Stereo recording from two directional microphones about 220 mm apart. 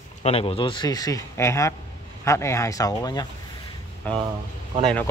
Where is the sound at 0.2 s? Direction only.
25° left (ahead or behind).